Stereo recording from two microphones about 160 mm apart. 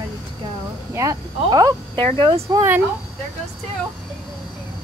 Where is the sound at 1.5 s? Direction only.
25° right (ahead or behind).